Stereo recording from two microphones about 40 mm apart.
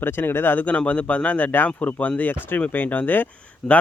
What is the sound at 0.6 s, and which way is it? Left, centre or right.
Speech, left.